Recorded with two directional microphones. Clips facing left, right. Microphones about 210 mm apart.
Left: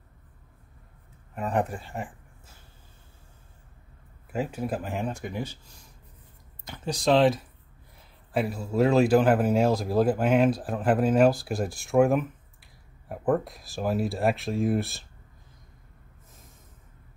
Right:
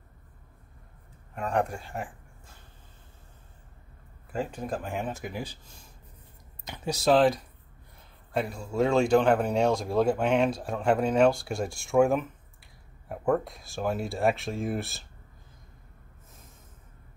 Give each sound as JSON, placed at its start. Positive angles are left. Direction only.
{"t": 1.3, "sound": "speech", "side_deg": 5}
{"t": 4.3, "sound": "speech", "side_deg": 10}
{"t": 6.6, "sound": "speech", "side_deg": -15}